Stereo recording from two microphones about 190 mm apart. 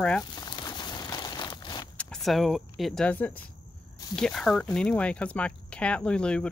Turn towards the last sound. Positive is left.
turn(degrees=5)  # may be behind; listen again after turning